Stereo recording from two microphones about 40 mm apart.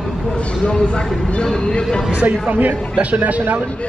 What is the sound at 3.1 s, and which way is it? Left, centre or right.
Speech, right.